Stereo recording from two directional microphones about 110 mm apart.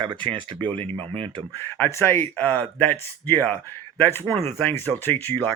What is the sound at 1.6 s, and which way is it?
Speech, 20° left (ahead or behind).